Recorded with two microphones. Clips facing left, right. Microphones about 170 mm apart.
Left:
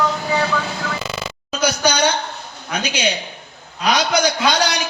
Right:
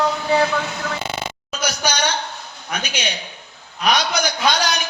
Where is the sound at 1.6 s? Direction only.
30° left (ahead or behind).